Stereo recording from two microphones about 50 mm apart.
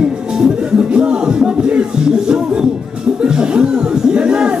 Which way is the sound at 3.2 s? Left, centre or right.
Centre.